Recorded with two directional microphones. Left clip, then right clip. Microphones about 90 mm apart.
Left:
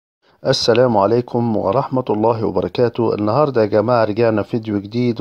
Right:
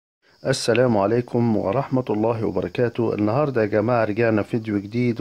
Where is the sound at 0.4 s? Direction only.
35° left (ahead or behind).